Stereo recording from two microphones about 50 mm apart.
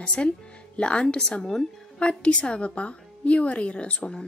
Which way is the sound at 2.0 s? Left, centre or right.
Left.